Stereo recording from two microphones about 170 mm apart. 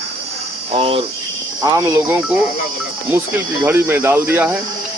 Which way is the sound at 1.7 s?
15° right (ahead or behind).